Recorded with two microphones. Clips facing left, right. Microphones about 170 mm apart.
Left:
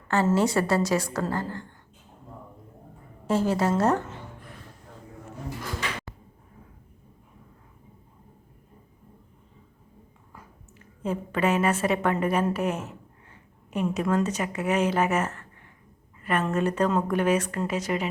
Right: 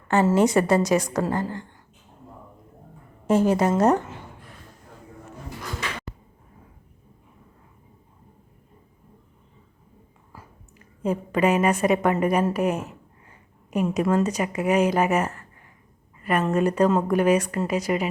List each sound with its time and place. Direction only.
0.1 s a woman's voice: 20° right (ahead or behind)
3.2 s a woman's voice: 20° right (ahead or behind)
11.0 s a woman's voice: 10° right (ahead or behind)
16.5 s a woman's voice: 10° right (ahead or behind)